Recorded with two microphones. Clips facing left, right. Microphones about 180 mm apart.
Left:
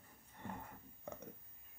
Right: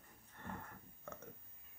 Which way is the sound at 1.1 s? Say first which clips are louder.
Left 3 dB; 15° left (ahead or behind).